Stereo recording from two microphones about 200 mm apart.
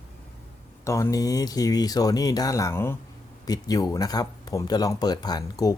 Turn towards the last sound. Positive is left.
turn(degrees=20)  # may be behind; listen again after turning